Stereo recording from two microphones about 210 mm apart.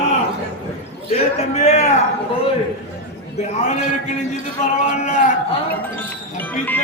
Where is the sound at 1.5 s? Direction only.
30° left (ahead or behind).